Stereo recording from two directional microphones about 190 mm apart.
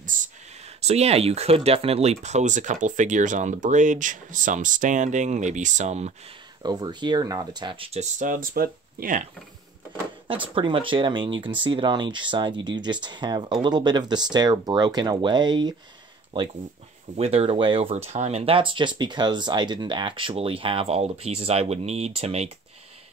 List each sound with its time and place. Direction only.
0.0 s a sound: 45° right (ahead or behind)
0.7 s speech: 35° right (ahead or behind)
6.6 s speech: 20° right (ahead or behind); by 9.2 s 45° right (ahead or behind)
10.5 s speech: 25° right (ahead or behind)
17.2 s speech: 30° right (ahead or behind)